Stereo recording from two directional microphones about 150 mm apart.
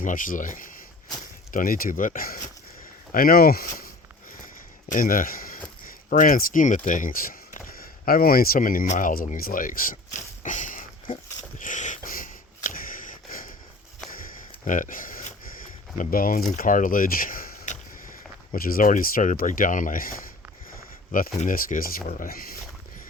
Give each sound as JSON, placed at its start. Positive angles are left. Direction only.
{"t": 0.0, "sound": "speech", "side_deg": 60}
{"t": 1.5, "sound": "speech", "side_deg": 70}
{"t": 4.9, "sound": "speech", "side_deg": 70}
{"t": 11.5, "sound": "a sound", "side_deg": 60}
{"t": 16.5, "sound": "speech", "side_deg": 60}
{"t": 21.1, "sound": "speech", "side_deg": 60}